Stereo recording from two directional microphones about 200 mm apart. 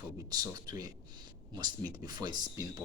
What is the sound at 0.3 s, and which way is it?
A man's voice, 20° right (ahead or behind).